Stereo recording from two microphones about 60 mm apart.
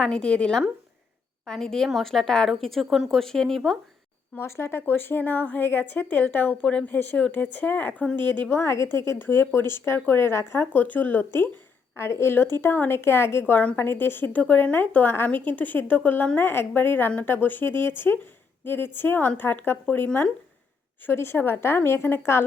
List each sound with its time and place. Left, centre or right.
0.0 s a woman's voice: centre
4.4 s a woman's voice: left
9.1 s speech: left
10.7 s a woman's voice: left
16.4 s a woman's voice: left
21.0 s a woman's voice: left